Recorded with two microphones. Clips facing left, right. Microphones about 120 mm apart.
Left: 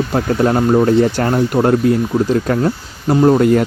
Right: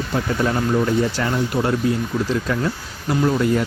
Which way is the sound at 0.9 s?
60° left (ahead or behind).